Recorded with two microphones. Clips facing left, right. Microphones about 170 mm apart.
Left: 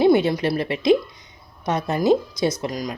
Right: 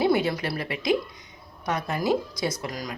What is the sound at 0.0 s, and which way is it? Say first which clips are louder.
A woman's voice: left 6 dB; 20° left (ahead or behind).